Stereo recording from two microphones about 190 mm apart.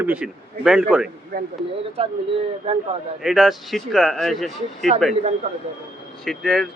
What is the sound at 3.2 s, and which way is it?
Speech, centre (ahead or behind).